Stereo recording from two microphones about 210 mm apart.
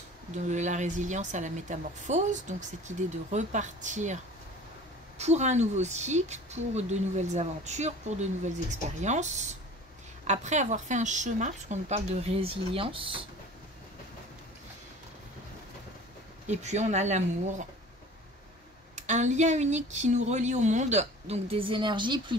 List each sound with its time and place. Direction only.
0.5 s speech: 35° right (ahead or behind)
16.4 s speech: 35° right (ahead or behind)
18.9 s speech: 35° right (ahead or behind)